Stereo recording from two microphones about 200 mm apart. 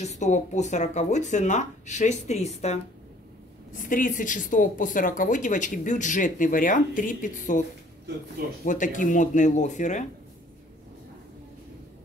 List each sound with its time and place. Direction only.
0.0 s speech: 35° left (ahead or behind)
8.6 s speech: 40° left (ahead or behind)